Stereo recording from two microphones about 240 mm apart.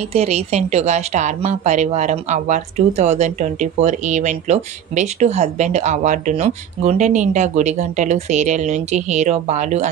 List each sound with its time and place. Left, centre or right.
0.1 s a woman's voice: right